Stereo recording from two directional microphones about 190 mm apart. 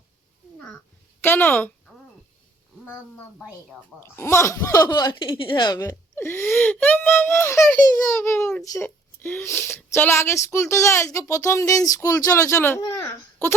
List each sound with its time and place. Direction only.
1.2 s a child's voice: 10° left (ahead or behind)